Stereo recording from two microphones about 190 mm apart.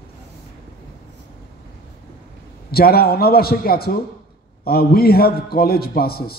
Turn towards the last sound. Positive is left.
turn(degrees=55)  # may be behind; listen again after turning